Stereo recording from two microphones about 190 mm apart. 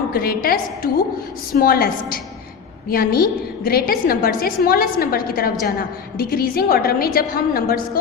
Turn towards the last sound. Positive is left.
turn(degrees=50)  # may be behind; listen again after turning